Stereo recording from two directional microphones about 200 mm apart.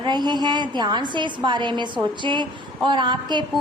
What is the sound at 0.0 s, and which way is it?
A woman's voice, 20° right (ahead or behind).